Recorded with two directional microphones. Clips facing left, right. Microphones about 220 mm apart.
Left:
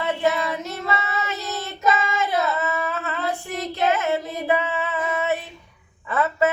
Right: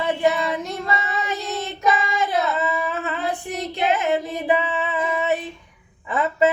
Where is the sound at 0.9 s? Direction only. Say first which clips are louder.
Left 1 dB; 15° right (ahead or behind).